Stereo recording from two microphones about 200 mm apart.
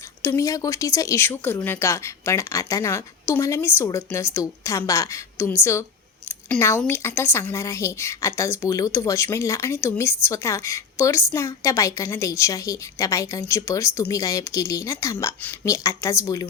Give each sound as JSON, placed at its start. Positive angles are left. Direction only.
{"t": 0.2, "sound": "speech", "side_deg": 15}